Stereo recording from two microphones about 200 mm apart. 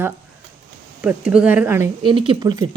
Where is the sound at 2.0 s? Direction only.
25° right (ahead or behind).